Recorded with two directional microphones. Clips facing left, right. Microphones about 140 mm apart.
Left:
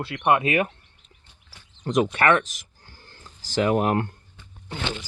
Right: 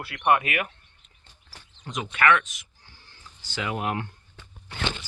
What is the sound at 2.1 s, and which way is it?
Speech, 35° left (ahead or behind).